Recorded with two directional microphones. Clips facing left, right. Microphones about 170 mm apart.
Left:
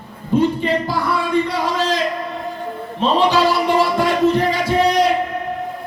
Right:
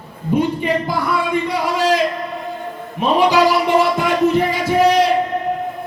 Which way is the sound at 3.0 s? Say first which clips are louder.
Right 2 dB; 15° right (ahead or behind).